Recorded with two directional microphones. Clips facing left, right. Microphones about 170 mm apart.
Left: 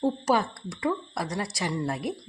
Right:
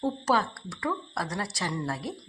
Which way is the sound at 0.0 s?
15° left (ahead or behind).